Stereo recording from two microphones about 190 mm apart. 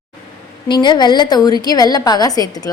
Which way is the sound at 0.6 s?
25° left (ahead or behind).